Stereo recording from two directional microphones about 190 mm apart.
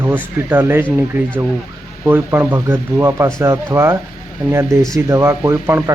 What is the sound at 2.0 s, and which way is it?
Speech, 10° right (ahead or behind).